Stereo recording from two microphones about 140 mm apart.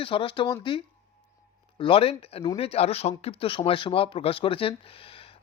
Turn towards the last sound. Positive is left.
turn(degrees=40)  # may be behind; listen again after turning